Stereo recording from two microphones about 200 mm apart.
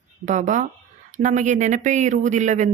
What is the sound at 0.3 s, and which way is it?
Speech, 40° right (ahead or behind).